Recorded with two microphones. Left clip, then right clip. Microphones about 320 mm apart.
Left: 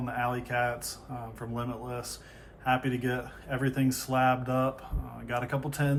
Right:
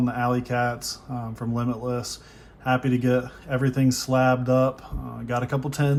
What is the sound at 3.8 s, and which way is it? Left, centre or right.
Speech, centre.